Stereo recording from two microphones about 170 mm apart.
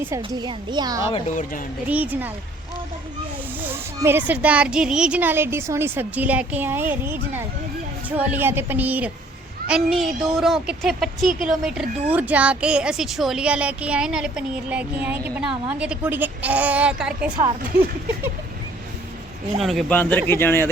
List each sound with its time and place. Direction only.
0.2 s a child's voice: 25° right (ahead or behind)
1.3 s speech: 50° left (ahead or behind)
1.9 s speech: 10° right (ahead or behind)
4.0 s speech: 10° right (ahead or behind)
17.4 s speech: 55° right (ahead or behind)
19.6 s speech: centre (ahead or behind)
20.0 s speech: 10° left (ahead or behind)